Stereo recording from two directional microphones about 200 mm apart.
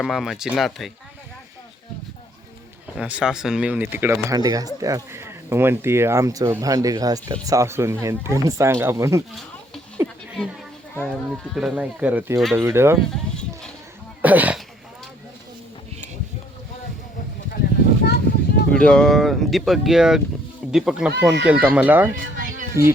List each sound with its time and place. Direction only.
0.0 s speech: centre (ahead or behind)
3.0 s speech: 5° right (ahead or behind)
10.0 s a sound: 5° right (ahead or behind)
10.9 s speech: 5° left (ahead or behind); by 13.0 s 10° right (ahead or behind)
14.2 s speech: 10° right (ahead or behind)
18.0 s a sound: 55° left (ahead or behind)
18.7 s speech: 5° left (ahead or behind)